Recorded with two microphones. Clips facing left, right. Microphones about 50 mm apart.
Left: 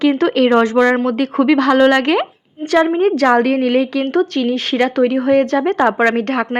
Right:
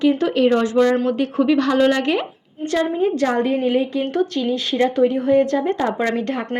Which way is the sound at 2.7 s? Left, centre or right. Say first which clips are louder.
Left 6 dB; left.